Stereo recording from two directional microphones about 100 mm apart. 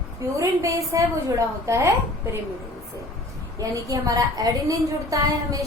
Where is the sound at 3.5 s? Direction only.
35° right (ahead or behind).